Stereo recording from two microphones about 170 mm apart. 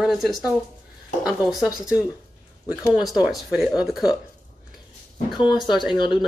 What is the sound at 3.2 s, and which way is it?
Speech, 5° right (ahead or behind).